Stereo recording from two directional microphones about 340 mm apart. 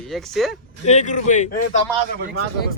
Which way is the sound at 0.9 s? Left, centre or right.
Centre.